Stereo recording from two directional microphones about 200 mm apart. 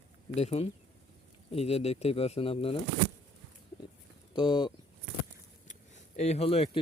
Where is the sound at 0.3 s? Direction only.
30° left (ahead or behind).